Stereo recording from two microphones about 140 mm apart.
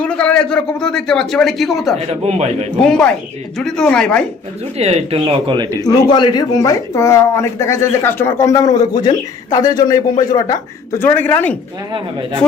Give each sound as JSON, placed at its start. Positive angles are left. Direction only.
{"t": 0.0, "sound": "a man's voice", "side_deg": 10}
{"t": 2.2, "sound": "a man's voice", "side_deg": -50}
{"t": 2.8, "sound": "speech", "side_deg": 5}
{"t": 4.8, "sound": "a man's voice", "side_deg": -50}
{"t": 5.2, "sound": "a man's voice", "side_deg": -35}
{"t": 5.8, "sound": "speech", "side_deg": 30}